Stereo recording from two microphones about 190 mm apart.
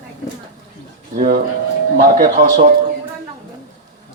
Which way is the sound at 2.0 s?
40° right (ahead or behind).